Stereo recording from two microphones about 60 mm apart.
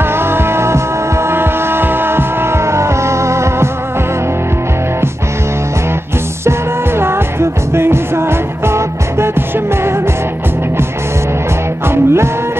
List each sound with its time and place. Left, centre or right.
0.1 s music: right
7.0 s music: right
11.9 s music: right